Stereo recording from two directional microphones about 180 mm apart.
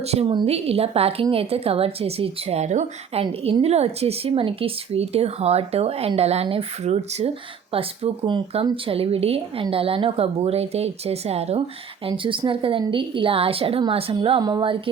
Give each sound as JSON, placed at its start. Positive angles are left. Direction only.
{"t": 0.0, "sound": "a woman's voice", "side_deg": -35}